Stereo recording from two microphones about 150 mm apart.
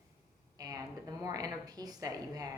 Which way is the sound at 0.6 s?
25° right (ahead or behind).